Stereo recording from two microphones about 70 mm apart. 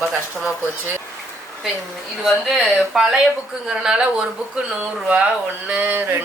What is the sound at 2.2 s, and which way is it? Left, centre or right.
A woman's voice, centre.